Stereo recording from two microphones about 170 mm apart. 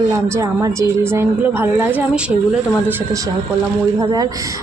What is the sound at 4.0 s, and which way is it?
Speech, 20° right (ahead or behind).